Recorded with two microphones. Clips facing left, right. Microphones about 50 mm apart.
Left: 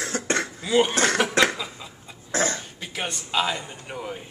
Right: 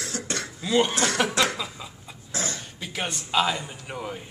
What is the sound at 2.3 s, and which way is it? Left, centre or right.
Cough, left.